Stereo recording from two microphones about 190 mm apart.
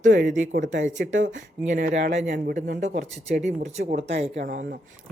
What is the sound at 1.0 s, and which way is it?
Speech, 75° right (ahead or behind).